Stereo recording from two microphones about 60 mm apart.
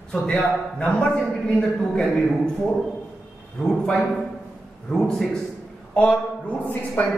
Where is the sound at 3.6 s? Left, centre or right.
Centre.